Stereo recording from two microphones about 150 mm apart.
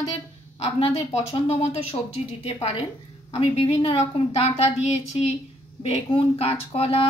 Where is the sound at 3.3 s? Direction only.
40° left (ahead or behind).